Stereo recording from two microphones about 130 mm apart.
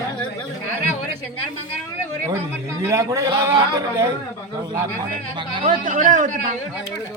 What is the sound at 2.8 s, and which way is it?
A man's voice, 25° right (ahead or behind).